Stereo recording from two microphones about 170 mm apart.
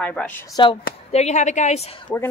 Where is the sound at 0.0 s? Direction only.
5° left (ahead or behind).